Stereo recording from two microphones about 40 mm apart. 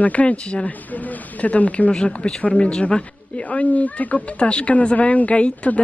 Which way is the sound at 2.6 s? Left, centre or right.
Left.